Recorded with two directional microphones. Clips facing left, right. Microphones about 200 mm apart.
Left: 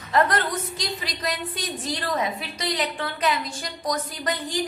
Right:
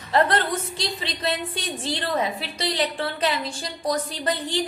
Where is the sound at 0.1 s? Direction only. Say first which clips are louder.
Right 1 dB; 30° right (ahead or behind).